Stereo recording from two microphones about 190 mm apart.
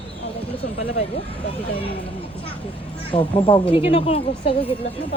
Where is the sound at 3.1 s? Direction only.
30° left (ahead or behind).